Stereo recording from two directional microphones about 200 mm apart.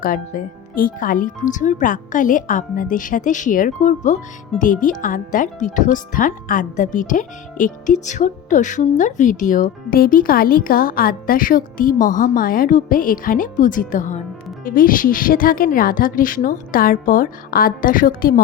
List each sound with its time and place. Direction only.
0.0 s a woman's voice: 45° left (ahead or behind)